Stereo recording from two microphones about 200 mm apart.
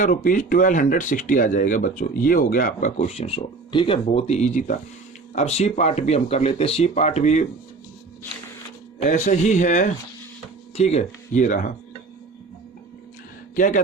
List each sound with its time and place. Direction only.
0.0 s speech: 40° left (ahead or behind)
9.0 s speech: 35° left (ahead or behind)
13.6 s speech: 40° left (ahead or behind)